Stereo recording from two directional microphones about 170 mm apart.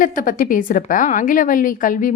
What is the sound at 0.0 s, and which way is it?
A woman's voice, 50° left (ahead or behind).